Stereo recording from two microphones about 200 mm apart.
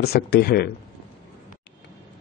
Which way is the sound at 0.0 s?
55° left (ahead or behind).